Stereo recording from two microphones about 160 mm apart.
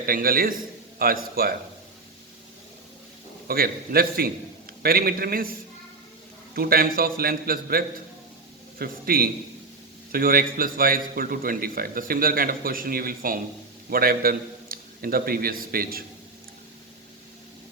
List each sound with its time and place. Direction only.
0.0 s a man's voice: 65° right (ahead or behind)
3.4 s a man's voice: 70° right (ahead or behind)
6.5 s a man's voice: 70° right (ahead or behind)